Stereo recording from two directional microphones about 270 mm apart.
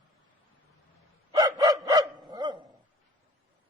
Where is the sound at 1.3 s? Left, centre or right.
Centre.